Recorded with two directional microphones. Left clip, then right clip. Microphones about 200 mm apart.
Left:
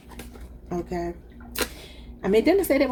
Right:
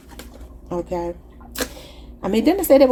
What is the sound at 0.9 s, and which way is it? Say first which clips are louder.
Speech: right 5 dB; 35° right (ahead or behind).